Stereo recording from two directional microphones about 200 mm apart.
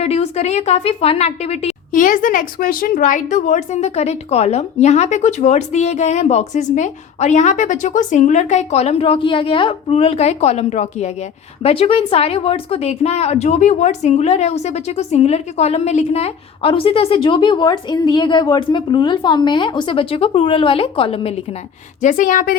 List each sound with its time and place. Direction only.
0.0 s a woman's voice: 30° left (ahead or behind)
22.0 s speech: 40° left (ahead or behind)